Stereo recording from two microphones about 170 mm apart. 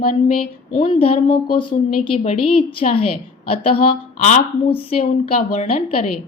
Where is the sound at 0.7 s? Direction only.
35° left (ahead or behind).